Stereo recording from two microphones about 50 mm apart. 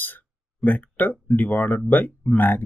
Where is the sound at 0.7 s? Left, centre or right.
Left.